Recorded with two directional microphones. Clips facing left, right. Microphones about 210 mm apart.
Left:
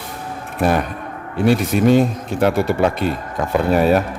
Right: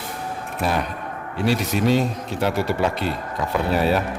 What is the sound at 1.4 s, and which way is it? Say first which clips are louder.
Speech: left 6 dB; 50° left (ahead or behind).